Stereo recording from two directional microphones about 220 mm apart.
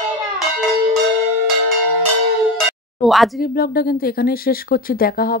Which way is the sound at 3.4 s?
40° left (ahead or behind).